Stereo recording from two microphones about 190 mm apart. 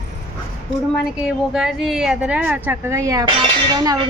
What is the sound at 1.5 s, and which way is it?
A woman's voice, centre (ahead or behind).